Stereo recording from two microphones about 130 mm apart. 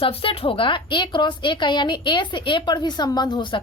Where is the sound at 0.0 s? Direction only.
45° left (ahead or behind).